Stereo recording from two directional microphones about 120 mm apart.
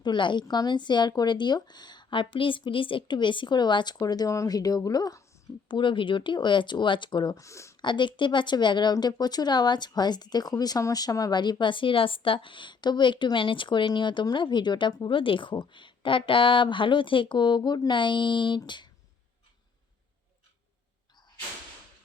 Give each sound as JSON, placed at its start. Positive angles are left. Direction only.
{"t": 0.0, "sound": "speech", "side_deg": 40}
{"t": 7.4, "sound": "speech", "side_deg": 25}
{"t": 7.8, "sound": "speech", "side_deg": 40}